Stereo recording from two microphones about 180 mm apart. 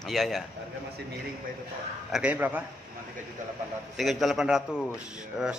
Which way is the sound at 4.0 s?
Centre (ahead or behind).